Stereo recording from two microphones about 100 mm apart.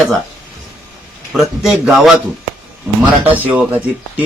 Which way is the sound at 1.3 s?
5° right (ahead or behind).